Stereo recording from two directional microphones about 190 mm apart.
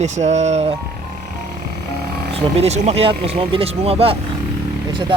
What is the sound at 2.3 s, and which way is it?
Speech, 35° right (ahead or behind).